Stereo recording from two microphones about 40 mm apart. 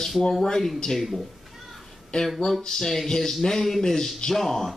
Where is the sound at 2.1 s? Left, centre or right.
Centre.